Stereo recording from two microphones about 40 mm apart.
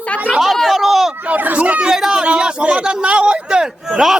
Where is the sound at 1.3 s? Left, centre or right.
Right.